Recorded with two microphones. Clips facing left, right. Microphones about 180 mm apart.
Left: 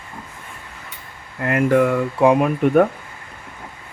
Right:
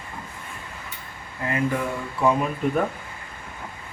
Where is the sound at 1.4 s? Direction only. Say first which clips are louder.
Left 9 dB; 75° left (ahead or behind).